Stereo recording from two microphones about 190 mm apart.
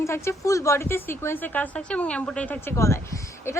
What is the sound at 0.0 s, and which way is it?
A woman's voice, 15° left (ahead or behind).